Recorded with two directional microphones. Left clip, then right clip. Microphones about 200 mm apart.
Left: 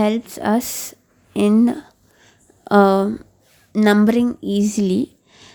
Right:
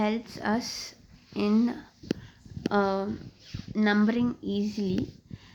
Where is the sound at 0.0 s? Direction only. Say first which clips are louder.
Left 10 dB; 50° left (ahead or behind).